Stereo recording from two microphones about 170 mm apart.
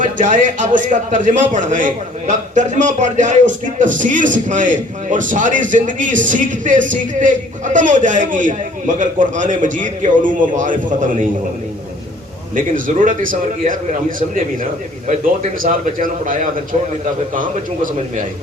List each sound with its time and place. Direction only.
0.0 s a man's voice: 50° right (ahead or behind)
12.5 s a man's voice: 50° right (ahead or behind)